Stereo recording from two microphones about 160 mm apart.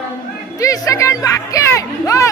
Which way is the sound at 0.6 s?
20° left (ahead or behind).